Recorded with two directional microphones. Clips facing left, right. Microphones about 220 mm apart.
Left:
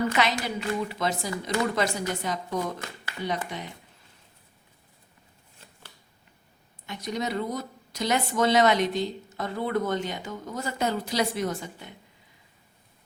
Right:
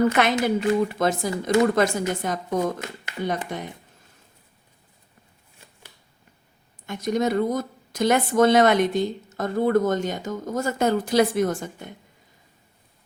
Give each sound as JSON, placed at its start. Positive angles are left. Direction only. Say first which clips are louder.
{"t": 0.1, "sound": "speech", "louder": "right 6 dB", "side_deg": -55}
{"t": 6.8, "sound": "speech", "louder": "right 8 dB", "side_deg": -50}